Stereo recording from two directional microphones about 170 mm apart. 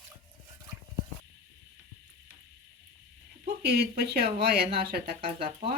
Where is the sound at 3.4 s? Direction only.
65° right (ahead or behind).